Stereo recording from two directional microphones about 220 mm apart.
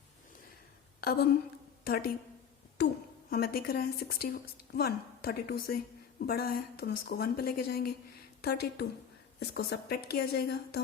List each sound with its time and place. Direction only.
1.0 s a woman's voice: 45° left (ahead or behind)
3.2 s a woman's voice: 45° left (ahead or behind)